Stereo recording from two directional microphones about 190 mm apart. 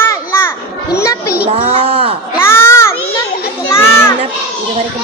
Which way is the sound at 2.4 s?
15° left (ahead or behind).